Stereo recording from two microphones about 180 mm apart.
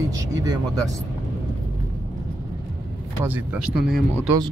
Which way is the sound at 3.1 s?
10° right (ahead or behind).